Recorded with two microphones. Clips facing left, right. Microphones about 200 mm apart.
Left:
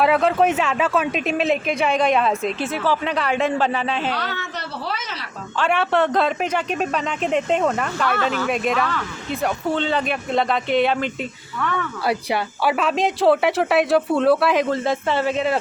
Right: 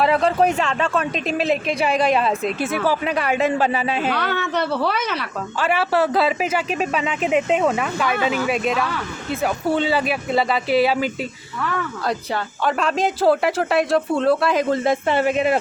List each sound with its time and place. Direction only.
0.0 s a man's voice: centre (ahead or behind)
4.1 s a woman's voice: 60° right (ahead or behind)
5.5 s a man's voice: 5° right (ahead or behind)
12.0 s a man's voice: 10° left (ahead or behind)
14.7 s speech: 15° right (ahead or behind)